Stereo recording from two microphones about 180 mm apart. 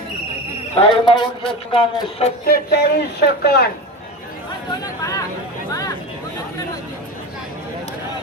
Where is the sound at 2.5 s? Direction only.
65° left (ahead or behind).